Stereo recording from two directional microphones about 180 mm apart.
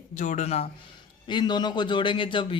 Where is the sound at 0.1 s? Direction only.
45° left (ahead or behind).